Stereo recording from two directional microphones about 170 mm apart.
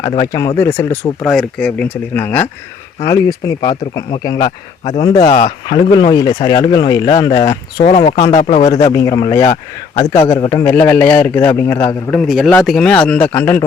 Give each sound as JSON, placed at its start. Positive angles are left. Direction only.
{"t": 0.2, "sound": "a man's voice", "side_deg": 20}
{"t": 1.3, "sound": "a man's voice", "side_deg": 0}
{"t": 5.1, "sound": "speech", "side_deg": 45}
{"t": 5.5, "sound": "speech", "side_deg": 25}
{"t": 7.9, "sound": "speech", "side_deg": 40}
{"t": 8.9, "sound": "a man's voice", "side_deg": 20}
{"t": 12.1, "sound": "a man's voice", "side_deg": 0}